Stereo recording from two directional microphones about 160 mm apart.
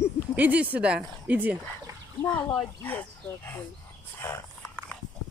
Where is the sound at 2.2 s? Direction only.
15° left (ahead or behind).